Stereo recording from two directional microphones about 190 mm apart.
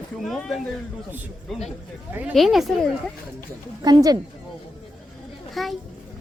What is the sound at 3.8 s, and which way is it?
Speech, 20° right (ahead or behind).